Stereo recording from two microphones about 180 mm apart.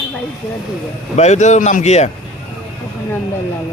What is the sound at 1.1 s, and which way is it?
Speech, 40° left (ahead or behind).